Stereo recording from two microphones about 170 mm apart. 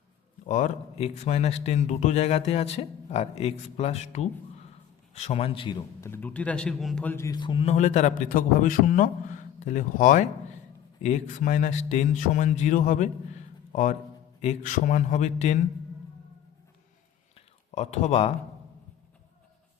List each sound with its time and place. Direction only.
0.4 s a man's voice: 45° left (ahead or behind)
6.0 s a man's voice: 10° left (ahead or behind)
7.3 s a man's voice: 25° left (ahead or behind)
7.7 s speech: 40° left (ahead or behind)
17.3 s a sound: 40° left (ahead or behind)